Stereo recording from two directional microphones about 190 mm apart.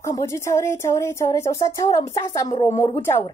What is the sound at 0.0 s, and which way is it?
Speech, 15° left (ahead or behind).